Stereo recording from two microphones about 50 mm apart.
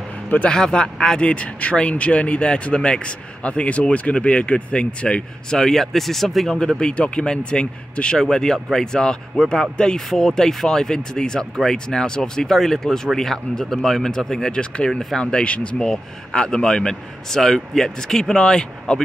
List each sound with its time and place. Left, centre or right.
0.5 s speech: centre
5.6 s speech: centre
6.8 s speech: left
15.4 s speech: left
15.8 s speech: centre